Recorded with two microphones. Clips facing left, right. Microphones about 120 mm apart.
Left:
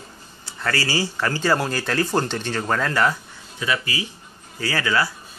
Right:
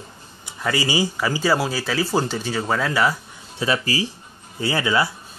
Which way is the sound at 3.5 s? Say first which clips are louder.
Right 3 dB; 35° right (ahead or behind).